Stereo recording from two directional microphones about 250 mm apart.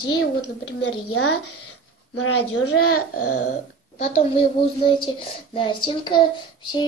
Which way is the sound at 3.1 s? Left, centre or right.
Left.